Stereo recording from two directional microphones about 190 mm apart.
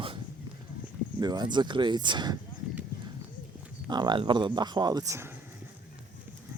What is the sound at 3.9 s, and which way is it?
Speech, 25° right (ahead or behind).